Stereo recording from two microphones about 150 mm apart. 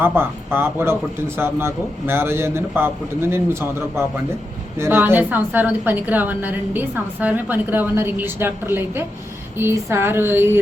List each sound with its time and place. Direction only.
0.0 s a woman's voice: 15° right (ahead or behind)